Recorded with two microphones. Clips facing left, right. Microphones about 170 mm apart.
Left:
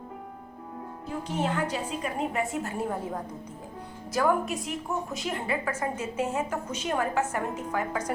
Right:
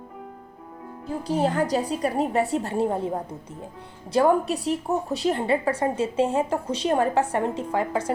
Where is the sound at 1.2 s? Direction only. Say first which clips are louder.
Right 6 dB; 35° right (ahead or behind).